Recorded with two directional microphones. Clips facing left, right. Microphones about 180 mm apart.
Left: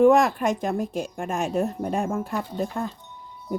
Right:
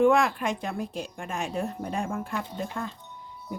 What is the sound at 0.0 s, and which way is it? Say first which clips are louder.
Speech: left 4 dB; 40° left (ahead or behind).